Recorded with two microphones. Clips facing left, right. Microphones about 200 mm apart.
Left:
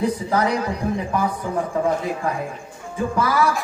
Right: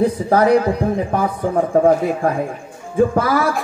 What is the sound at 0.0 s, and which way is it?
A man's voice, 55° right (ahead or behind).